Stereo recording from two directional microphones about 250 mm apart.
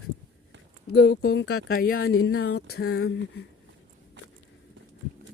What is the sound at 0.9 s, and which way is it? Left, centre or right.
Speech, left.